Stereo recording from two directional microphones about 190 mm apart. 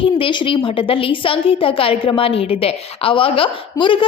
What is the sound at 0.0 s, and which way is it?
A woman's voice, 25° left (ahead or behind).